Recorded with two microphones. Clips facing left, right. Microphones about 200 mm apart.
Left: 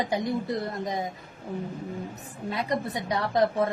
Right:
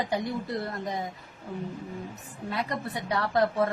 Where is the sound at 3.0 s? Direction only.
20° left (ahead or behind).